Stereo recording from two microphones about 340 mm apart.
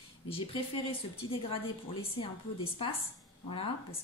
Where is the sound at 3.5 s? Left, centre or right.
Centre.